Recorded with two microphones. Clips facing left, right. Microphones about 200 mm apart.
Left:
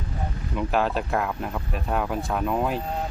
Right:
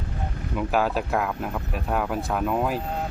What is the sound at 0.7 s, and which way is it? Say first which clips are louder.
Speech: right 1 dB; 5° right (ahead or behind).